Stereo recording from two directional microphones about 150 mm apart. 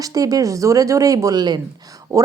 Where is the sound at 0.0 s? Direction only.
25° right (ahead or behind).